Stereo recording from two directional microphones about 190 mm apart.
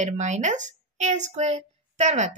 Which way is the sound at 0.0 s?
40° right (ahead or behind).